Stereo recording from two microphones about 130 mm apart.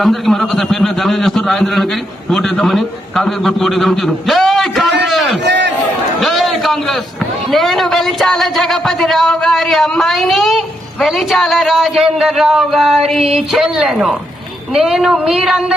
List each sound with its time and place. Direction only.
0.0 s speech: centre (ahead or behind)
6.1 s a sound: centre (ahead or behind)
7.5 s speech: centre (ahead or behind)